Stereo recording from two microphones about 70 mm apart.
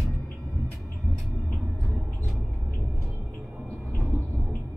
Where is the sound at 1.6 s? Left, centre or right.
Centre.